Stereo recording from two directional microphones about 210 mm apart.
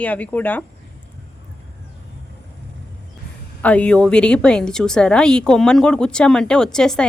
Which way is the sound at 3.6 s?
5° left (ahead or behind).